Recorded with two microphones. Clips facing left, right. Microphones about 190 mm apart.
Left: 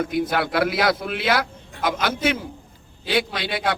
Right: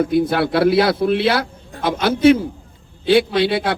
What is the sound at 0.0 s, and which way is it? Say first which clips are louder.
A man's voice: right 6 dB; 30° right (ahead or behind).